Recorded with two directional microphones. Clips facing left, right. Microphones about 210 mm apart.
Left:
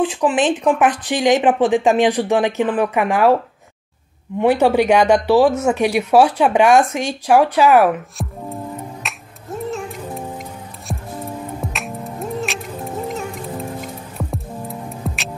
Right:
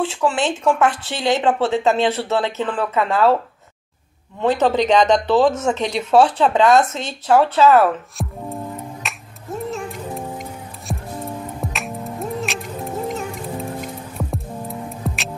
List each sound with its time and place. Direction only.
0.0 s speech: 15° left (ahead or behind)
4.4 s speech: 10° left (ahead or behind)
8.2 s music: centre (ahead or behind)